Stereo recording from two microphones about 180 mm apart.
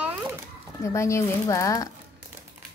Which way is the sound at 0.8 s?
15° left (ahead or behind).